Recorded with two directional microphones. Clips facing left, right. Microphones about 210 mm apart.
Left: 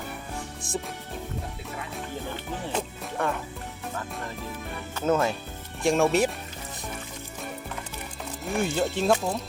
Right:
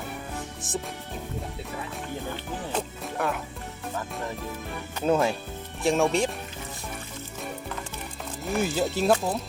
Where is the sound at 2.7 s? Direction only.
Centre (ahead or behind).